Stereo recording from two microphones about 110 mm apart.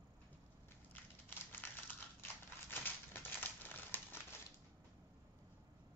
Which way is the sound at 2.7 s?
20° left (ahead or behind).